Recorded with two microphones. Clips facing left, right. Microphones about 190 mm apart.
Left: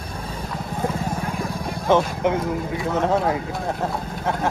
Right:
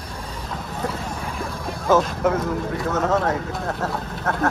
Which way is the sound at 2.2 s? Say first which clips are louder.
Even; 10° left (ahead or behind).